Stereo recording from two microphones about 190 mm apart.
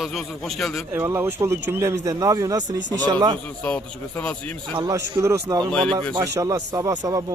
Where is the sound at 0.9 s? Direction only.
10° right (ahead or behind).